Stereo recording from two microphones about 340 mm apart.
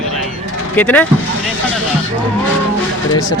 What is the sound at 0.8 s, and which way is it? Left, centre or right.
Speech, centre.